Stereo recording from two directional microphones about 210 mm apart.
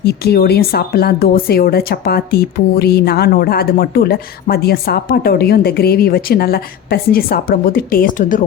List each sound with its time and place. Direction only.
0.0 s speech: 50° left (ahead or behind)